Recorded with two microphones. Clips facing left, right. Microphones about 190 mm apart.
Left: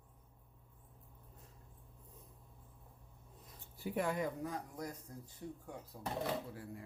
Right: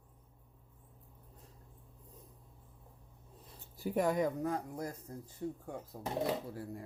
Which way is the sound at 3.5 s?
40° right (ahead or behind).